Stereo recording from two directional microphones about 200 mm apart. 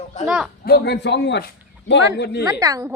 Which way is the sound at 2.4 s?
15° right (ahead or behind).